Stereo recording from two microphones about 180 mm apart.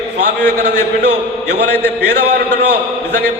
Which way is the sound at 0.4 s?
65° right (ahead or behind).